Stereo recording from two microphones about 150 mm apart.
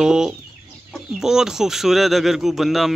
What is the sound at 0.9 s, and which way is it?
Speech, 5° right (ahead or behind).